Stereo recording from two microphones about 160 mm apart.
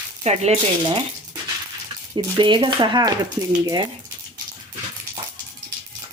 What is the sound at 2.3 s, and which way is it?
Speech, 30° right (ahead or behind).